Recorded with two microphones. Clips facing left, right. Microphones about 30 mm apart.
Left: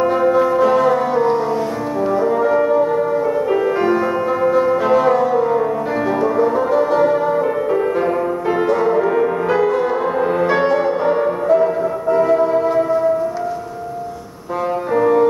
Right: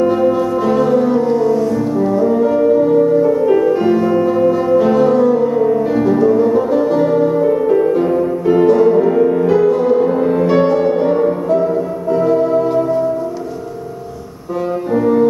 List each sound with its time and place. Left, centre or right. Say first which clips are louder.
0.0 s music: right 1 dB; centre
1.2 s music: right 3 dB; left
2.0 s french horn: right 1 dB; centre
3.2 s music: right 5 dB; centre
14.9 s french horn: right 1 dB; centre